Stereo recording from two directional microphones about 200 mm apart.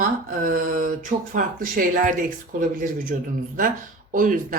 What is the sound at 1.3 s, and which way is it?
Speech, 45° right (ahead or behind).